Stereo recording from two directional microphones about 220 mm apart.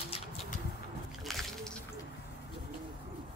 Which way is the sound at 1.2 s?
Centre (ahead or behind).